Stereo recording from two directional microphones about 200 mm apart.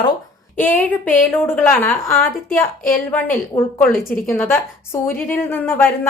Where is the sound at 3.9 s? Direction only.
45° left (ahead or behind).